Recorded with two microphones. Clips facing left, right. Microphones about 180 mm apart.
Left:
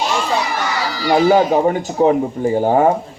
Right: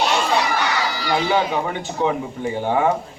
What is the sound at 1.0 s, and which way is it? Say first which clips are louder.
Speech: left 9 dB; 40° left (ahead or behind).